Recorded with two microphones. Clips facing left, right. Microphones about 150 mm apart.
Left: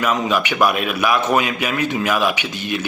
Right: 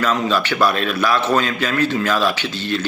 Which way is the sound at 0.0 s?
15° left (ahead or behind).